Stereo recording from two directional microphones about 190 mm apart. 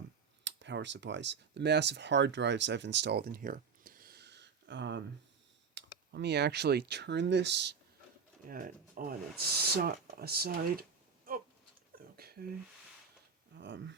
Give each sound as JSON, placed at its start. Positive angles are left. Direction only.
{"t": 0.4, "sound": "speech", "side_deg": -70}
{"t": 8.4, "sound": "speech", "side_deg": -45}
{"t": 11.9, "sound": "a sound", "side_deg": -55}
{"t": 13.5, "sound": "speech", "side_deg": -65}